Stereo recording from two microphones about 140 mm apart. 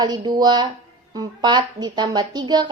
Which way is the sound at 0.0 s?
30° right (ahead or behind).